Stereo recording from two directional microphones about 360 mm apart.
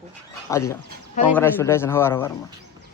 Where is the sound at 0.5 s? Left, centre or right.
Centre.